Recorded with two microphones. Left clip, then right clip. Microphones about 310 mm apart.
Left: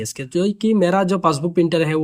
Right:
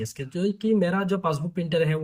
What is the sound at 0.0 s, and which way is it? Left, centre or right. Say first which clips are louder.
Speech: left 7 dB; left.